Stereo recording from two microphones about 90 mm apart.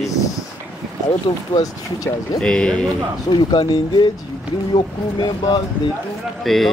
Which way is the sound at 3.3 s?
45° left (ahead or behind).